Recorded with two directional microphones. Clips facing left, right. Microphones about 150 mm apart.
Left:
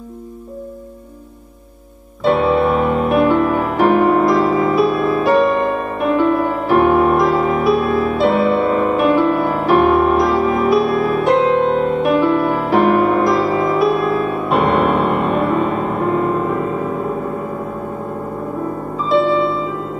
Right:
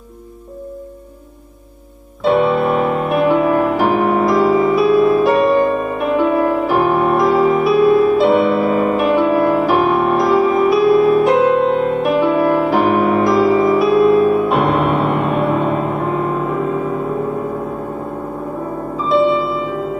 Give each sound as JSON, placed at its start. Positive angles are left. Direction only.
{"t": 2.2, "sound": "music", "side_deg": 0}
{"t": 18.9, "sound": "music", "side_deg": 0}